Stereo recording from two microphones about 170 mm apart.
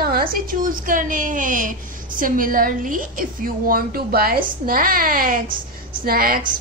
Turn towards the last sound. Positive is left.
turn(degrees=-60)  # may be behind; listen again after turning